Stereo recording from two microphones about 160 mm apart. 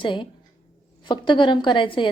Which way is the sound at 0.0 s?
30° left (ahead or behind).